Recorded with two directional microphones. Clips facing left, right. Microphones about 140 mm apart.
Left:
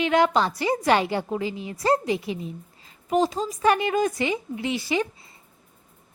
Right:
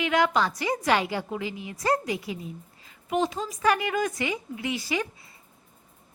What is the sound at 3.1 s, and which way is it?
A woman's voice, 35° left (ahead or behind).